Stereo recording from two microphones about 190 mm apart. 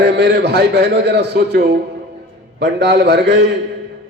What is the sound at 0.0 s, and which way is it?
A man's voice, 65° right (ahead or behind).